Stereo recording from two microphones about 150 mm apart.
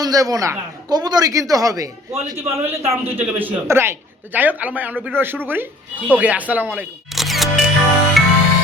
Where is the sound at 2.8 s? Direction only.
40° right (ahead or behind).